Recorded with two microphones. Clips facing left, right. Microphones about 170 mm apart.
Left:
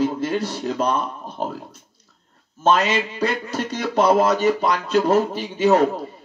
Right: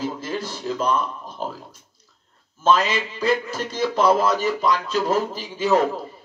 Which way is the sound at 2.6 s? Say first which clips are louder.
Left 1 dB; 60° left (ahead or behind).